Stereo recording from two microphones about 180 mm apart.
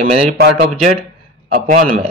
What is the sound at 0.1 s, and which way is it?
Speech, 40° right (ahead or behind).